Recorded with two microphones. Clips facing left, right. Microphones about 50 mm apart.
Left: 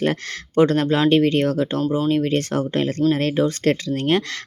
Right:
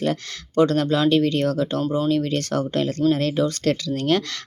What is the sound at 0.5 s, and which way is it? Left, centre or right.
Speech, left.